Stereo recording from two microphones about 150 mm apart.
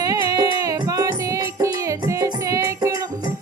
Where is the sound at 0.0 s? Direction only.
25° right (ahead or behind).